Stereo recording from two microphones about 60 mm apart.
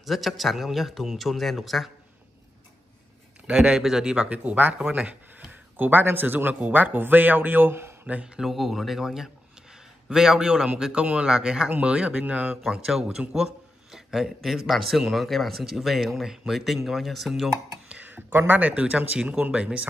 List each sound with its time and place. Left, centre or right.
0.0 s speech: centre
3.4 s a man's voice: centre
5.5 s speech: right
8.4 s a man's voice: centre; by 12.5 s right
12.6 s a man's voice: centre
17.8 s a sound: right
18.5 s speech: right